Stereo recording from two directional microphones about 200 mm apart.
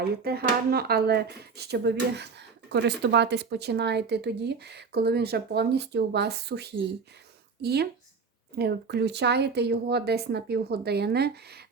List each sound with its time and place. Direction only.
0.3 s a woman's voice: 50° right (ahead or behind)